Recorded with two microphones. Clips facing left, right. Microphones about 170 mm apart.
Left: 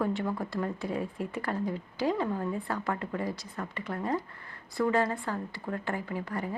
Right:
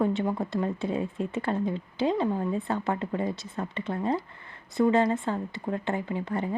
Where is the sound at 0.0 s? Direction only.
20° right (ahead or behind).